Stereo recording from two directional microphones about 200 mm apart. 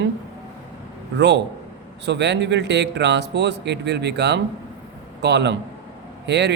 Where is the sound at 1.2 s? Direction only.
60° right (ahead or behind).